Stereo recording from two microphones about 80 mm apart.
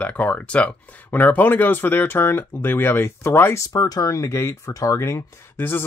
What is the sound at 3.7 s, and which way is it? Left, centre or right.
Speech, left.